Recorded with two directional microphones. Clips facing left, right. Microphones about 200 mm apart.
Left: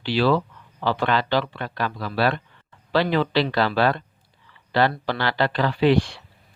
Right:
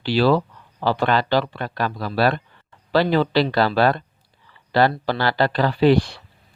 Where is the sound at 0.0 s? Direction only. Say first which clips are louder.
Right 3 dB; 40° right (ahead or behind).